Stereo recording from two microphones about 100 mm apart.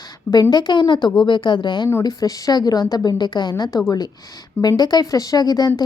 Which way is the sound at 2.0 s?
40° left (ahead or behind).